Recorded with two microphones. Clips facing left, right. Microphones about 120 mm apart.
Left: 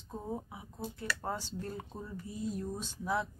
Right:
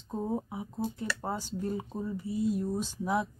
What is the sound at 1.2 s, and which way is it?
Speech, 15° right (ahead or behind).